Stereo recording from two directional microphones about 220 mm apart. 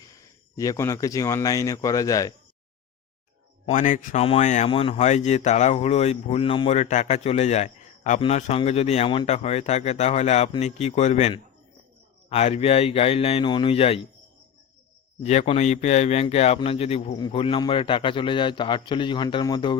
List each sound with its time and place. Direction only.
0.5 s speech: 15° left (ahead or behind)
3.7 s speech: 35° left (ahead or behind)
15.2 s speech: 30° left (ahead or behind)